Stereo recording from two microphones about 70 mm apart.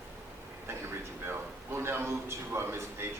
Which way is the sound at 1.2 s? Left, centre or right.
Right.